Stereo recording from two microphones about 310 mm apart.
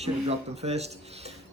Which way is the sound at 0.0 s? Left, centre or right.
Centre.